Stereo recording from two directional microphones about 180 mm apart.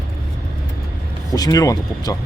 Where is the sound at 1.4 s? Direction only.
20° left (ahead or behind).